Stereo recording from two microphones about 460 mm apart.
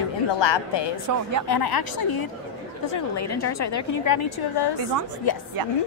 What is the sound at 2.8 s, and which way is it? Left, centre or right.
A woman's voice, left.